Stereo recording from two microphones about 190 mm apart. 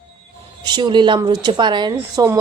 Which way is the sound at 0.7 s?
25° right (ahead or behind).